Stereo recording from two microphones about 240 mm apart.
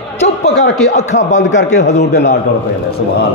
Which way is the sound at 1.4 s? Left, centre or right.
Left.